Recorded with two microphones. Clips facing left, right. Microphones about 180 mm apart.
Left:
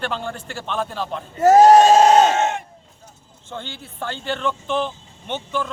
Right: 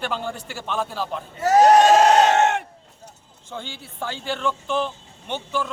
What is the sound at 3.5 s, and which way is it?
Speech, 10° right (ahead or behind).